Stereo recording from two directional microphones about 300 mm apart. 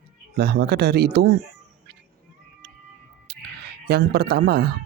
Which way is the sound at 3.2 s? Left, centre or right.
Right.